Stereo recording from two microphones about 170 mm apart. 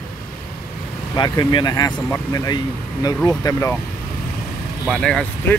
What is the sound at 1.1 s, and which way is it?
Speech, 25° left (ahead or behind).